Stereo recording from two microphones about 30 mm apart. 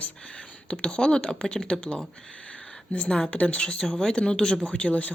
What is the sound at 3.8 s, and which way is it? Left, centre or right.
Speech, centre.